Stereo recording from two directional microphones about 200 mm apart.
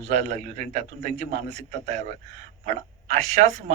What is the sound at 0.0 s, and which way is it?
A man's voice, 35° right (ahead or behind).